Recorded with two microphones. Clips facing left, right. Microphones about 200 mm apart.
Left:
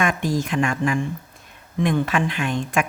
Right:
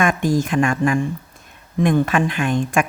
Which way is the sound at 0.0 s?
50° right (ahead or behind).